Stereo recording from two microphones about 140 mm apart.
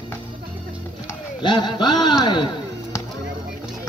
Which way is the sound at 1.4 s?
35° left (ahead or behind).